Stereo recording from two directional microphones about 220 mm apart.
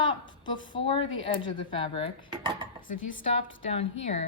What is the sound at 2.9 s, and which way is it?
Speech, 60° left (ahead or behind).